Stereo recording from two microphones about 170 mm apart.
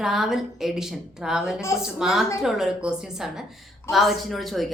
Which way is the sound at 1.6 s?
15° left (ahead or behind).